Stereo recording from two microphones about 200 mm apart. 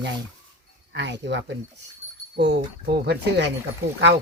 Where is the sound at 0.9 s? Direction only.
60° right (ahead or behind).